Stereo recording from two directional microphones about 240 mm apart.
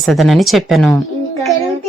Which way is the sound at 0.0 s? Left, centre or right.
Centre.